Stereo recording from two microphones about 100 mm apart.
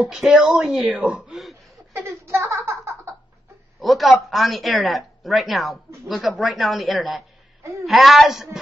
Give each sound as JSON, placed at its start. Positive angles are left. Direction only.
{"t": 0.0, "sound": "speech", "side_deg": -5}
{"t": 2.0, "sound": "a sound", "side_deg": -25}
{"t": 3.8, "sound": "speech", "side_deg": 0}